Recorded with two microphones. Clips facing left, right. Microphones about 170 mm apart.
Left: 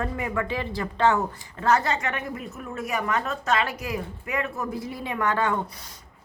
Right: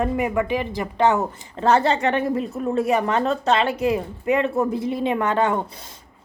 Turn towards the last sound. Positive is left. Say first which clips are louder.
# right 5 dB
turn(degrees=-20)  # may be behind; listen again after turning